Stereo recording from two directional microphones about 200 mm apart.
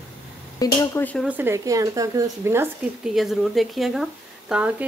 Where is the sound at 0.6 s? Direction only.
20° left (ahead or behind).